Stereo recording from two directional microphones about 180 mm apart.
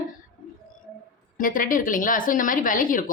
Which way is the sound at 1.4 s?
50° left (ahead or behind).